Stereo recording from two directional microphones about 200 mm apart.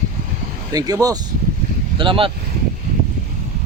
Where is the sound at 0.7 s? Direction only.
20° right (ahead or behind).